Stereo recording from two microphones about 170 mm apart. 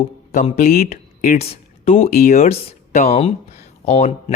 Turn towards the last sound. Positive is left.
turn(degrees=40)  # may be behind; listen again after turning